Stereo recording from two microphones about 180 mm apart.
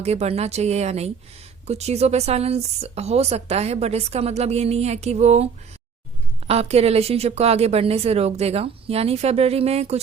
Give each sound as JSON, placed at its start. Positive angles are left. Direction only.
{"t": 0.0, "sound": "a woman's voice", "side_deg": -35}
{"t": 6.5, "sound": "a woman's voice", "side_deg": -35}